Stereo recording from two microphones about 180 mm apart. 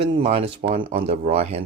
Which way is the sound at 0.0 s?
30° right (ahead or behind).